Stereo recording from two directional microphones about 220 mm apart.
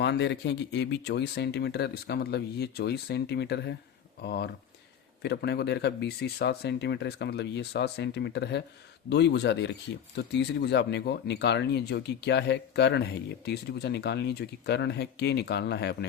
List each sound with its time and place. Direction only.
0.0 s speech: 50° left (ahead or behind)